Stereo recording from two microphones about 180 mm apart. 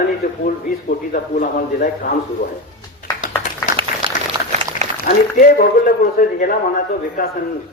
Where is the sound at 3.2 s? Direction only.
45° left (ahead or behind).